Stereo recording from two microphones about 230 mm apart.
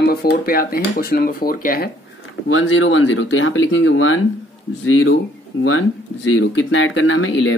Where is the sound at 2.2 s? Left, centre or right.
Left.